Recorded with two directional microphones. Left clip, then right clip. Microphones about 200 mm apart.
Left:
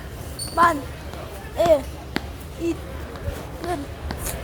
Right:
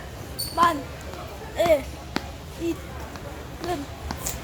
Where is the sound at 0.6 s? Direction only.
25° left (ahead or behind).